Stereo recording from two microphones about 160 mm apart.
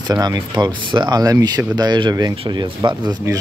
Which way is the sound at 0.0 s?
25° right (ahead or behind).